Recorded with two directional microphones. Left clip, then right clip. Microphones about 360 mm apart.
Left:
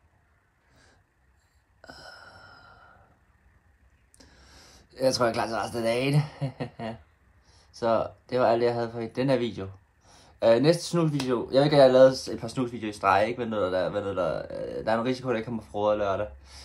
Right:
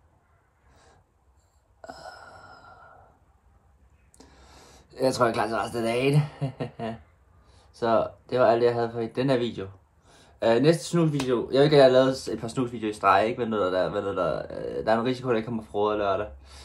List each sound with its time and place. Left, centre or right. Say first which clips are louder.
1.8 s gasp: right 4 dB; centre
4.2 s speech: right 2 dB; centre